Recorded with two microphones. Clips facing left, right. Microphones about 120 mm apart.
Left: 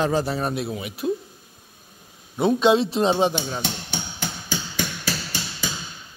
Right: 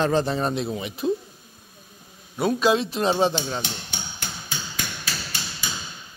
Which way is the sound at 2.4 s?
25° left (ahead or behind).